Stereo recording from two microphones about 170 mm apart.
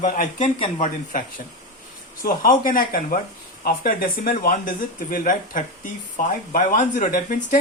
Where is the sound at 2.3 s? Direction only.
55° left (ahead or behind).